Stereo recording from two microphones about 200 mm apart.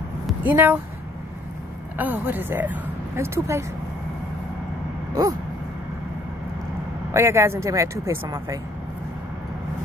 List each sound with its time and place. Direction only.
0.5 s speech: 10° right (ahead or behind)
2.0 s speech: 10° right (ahead or behind)
5.2 s a sound: 20° right (ahead or behind)
7.2 s speech: 15° right (ahead or behind)